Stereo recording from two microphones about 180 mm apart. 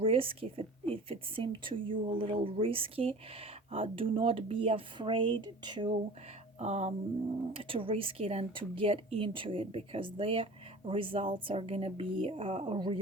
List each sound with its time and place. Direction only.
0.0 s speech: 30° right (ahead or behind)
6.6 s speech: 40° right (ahead or behind)